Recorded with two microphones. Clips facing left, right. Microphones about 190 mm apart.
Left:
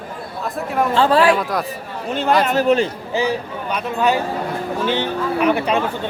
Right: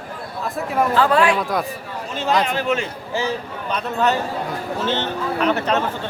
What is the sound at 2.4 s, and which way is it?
Speech, 40° left (ahead or behind).